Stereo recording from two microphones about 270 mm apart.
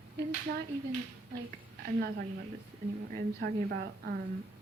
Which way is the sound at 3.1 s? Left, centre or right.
Right.